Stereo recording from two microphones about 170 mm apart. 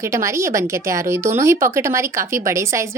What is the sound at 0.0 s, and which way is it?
Speech, 15° right (ahead or behind).